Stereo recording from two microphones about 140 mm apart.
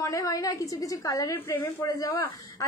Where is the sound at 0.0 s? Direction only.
25° left (ahead or behind).